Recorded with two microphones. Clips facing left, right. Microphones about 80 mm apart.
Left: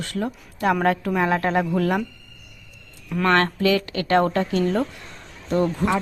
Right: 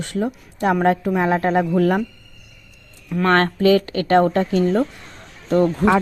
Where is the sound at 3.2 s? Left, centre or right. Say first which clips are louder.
Right 4 dB; right.